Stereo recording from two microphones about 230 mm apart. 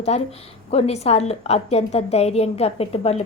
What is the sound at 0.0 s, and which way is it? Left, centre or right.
A woman's voice, left.